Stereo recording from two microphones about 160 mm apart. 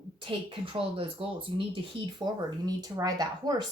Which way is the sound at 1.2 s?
35° right (ahead or behind).